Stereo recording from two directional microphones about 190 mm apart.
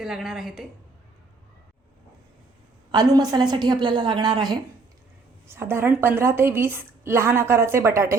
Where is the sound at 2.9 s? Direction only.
20° right (ahead or behind).